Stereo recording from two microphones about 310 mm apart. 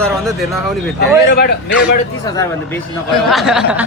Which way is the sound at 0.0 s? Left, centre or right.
Centre.